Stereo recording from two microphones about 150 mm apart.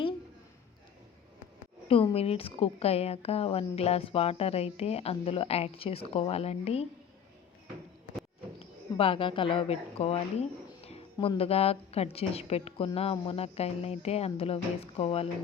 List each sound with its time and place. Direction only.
1.9 s a woman's voice: 40° left (ahead or behind)
8.5 s a woman's voice: 40° left (ahead or behind)